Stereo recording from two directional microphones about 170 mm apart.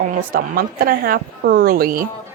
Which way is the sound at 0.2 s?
55° right (ahead or behind).